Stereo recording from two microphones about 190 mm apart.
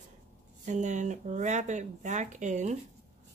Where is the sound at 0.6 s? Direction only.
40° right (ahead or behind).